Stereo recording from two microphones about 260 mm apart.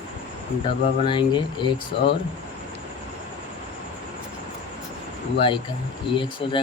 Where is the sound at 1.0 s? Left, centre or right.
Centre.